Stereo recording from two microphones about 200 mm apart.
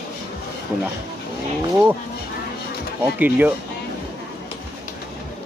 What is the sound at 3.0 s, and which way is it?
Speech, 10° right (ahead or behind).